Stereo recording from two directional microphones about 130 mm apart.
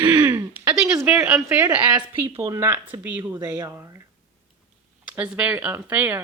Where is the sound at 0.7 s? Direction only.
10° right (ahead or behind).